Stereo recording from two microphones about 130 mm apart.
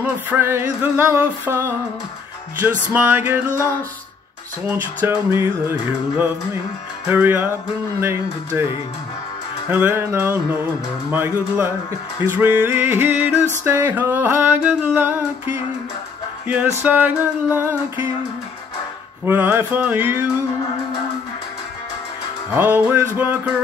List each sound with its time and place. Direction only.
0.0 s music: 15° right (ahead or behind)
2.9 s music: 15° right (ahead or behind)
4.6 s music: 15° right (ahead or behind)
8.0 s speech: 20° right (ahead or behind)
9.7 s music: 15° right (ahead or behind)
16.8 s music: 10° right (ahead or behind)
19.2 s music: 15° right (ahead or behind)
22.5 s music: 15° right (ahead or behind)